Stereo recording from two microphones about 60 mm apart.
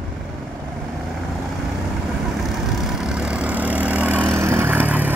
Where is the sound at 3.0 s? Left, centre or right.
Centre.